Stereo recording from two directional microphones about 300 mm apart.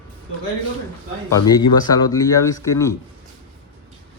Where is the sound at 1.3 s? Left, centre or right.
Centre.